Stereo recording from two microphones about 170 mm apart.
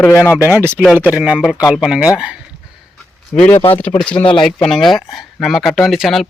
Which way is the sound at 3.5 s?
30° left (ahead or behind).